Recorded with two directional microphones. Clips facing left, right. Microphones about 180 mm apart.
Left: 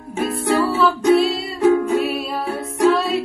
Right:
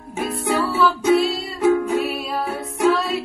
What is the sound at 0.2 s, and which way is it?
Music, centre (ahead or behind).